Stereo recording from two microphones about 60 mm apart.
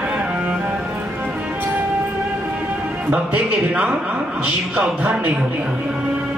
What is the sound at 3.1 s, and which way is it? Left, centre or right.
Speech, right.